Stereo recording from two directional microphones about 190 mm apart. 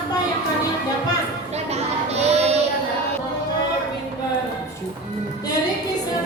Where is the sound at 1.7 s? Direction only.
35° right (ahead or behind).